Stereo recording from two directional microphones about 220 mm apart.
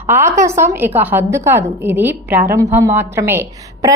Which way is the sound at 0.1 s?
10° right (ahead or behind).